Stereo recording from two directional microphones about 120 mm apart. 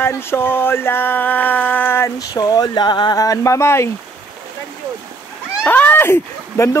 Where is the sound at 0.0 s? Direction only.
20° left (ahead or behind).